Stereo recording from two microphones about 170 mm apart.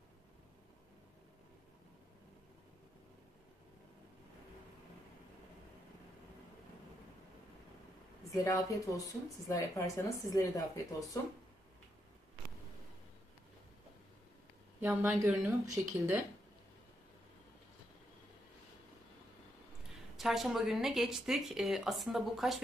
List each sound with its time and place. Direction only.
8.3 s a woman's voice: 20° left (ahead or behind)
14.8 s speech: 10° right (ahead or behind)
20.1 s a woman's voice: centre (ahead or behind)